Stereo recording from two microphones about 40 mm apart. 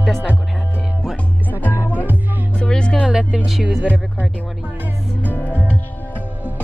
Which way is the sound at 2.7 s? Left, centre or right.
Centre.